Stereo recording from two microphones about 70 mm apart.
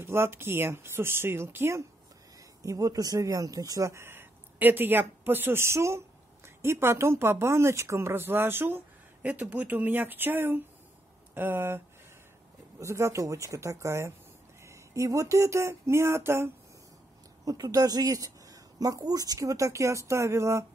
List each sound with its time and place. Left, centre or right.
0.0 s speech: right
2.6 s speech: right
4.0 s a woman's voice: right
12.7 s speech: right
14.6 s a sound: right
17.5 s speech: right